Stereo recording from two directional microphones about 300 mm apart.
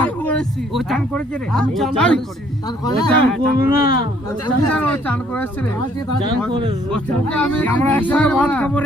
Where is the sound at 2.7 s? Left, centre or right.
Centre.